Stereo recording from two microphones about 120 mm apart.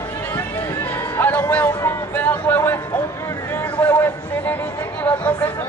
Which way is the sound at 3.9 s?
20° left (ahead or behind).